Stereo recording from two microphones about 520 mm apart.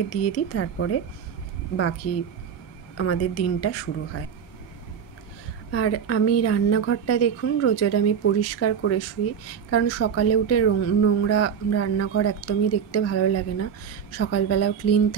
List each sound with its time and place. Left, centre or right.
0.1 s speech: left
5.7 s speech: left